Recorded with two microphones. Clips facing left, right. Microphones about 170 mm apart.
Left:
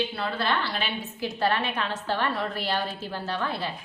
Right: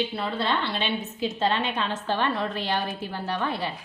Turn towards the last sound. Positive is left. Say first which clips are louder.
# right 2 dB
turn(degrees=-15)  # may be behind; listen again after turning